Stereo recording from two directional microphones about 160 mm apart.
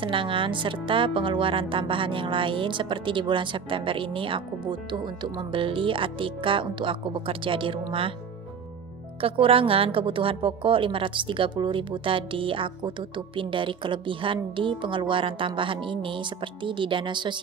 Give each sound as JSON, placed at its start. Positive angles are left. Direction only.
{"t": 0.0, "sound": "speech", "side_deg": -30}
{"t": 9.2, "sound": "speech", "side_deg": -35}